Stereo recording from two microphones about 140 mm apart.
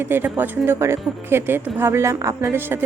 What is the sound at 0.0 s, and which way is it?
A woman's voice, 15° right (ahead or behind).